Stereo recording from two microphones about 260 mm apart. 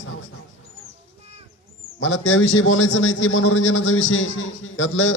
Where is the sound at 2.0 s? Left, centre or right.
Left.